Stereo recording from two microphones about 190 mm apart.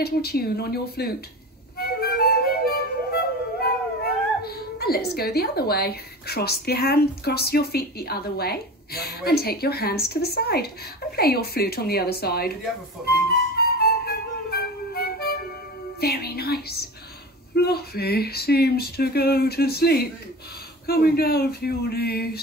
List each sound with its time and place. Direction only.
0.0 s speech: 55° left (ahead or behind)
1.8 s music: 55° left (ahead or behind)
13.6 s music: 55° left (ahead or behind)
16.0 s a woman's voice: 55° left (ahead or behind)